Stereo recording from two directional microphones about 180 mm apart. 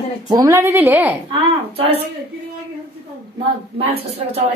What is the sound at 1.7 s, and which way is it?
Speech, 30° right (ahead or behind).